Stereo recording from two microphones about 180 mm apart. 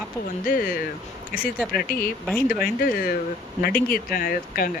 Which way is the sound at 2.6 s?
55° left (ahead or behind).